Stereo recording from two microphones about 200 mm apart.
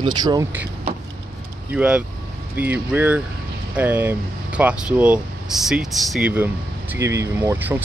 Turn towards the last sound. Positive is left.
turn(degrees=-10)  # may be behind; listen again after turning